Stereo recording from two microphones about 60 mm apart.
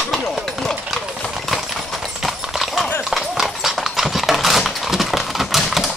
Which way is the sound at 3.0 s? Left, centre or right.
Centre.